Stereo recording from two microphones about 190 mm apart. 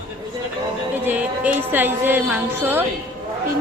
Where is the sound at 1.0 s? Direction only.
10° right (ahead or behind).